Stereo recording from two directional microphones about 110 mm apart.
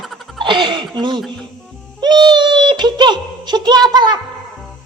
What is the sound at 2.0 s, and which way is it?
Speech, 40° right (ahead or behind).